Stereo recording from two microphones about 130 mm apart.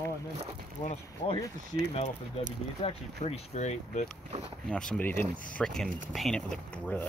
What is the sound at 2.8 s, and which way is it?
Speech, 55° left (ahead or behind).